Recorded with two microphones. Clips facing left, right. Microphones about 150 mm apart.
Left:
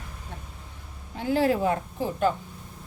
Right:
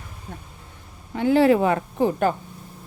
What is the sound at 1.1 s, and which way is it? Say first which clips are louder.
A woman's voice: right 7 dB; 75° right (ahead or behind).